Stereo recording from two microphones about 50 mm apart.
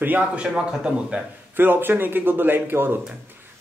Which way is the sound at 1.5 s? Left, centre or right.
Right.